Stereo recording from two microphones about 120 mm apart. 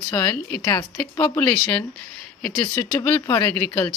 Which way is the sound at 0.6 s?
30° left (ahead or behind).